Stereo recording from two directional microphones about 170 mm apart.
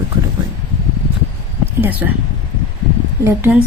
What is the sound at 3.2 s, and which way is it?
Speech, 15° right (ahead or behind).